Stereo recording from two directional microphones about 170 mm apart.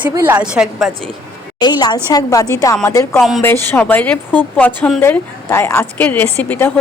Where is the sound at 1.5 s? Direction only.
25° left (ahead or behind).